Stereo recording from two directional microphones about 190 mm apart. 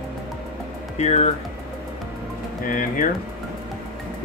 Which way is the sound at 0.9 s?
35° left (ahead or behind).